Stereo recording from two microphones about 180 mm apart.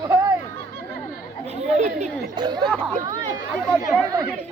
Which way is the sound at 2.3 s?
25° right (ahead or behind).